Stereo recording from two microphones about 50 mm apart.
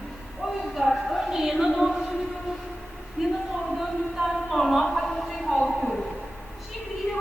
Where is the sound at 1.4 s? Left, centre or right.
Centre.